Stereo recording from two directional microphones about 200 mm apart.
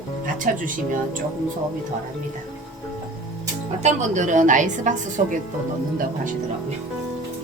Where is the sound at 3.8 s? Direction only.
40° right (ahead or behind).